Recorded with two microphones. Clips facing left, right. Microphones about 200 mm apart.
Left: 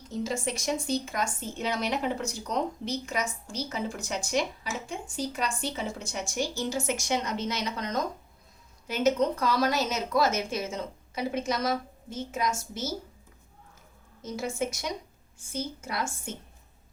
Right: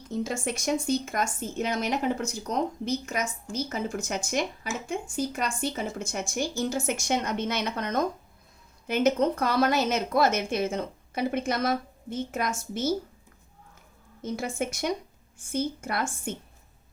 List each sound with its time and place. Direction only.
0.1 s a woman's voice: 55° right (ahead or behind)
14.2 s a woman's voice: 55° right (ahead or behind)